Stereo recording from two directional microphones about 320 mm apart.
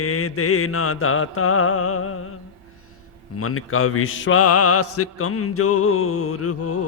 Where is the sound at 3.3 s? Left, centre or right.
Left.